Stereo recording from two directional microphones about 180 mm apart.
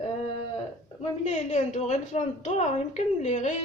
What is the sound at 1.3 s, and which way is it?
A woman's voice, 40° left (ahead or behind).